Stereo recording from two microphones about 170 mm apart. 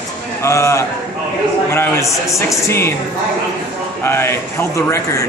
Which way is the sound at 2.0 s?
Centre (ahead or behind).